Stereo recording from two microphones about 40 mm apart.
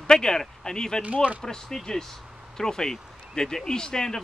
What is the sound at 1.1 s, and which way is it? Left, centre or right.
Speech, right.